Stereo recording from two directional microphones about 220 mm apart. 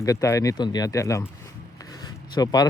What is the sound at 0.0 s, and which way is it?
Speech, 15° left (ahead or behind).